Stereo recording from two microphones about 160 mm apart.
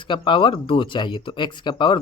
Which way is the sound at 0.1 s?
30° left (ahead or behind).